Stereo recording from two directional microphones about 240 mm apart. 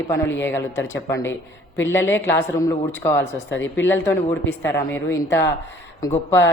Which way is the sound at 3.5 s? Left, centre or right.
Left.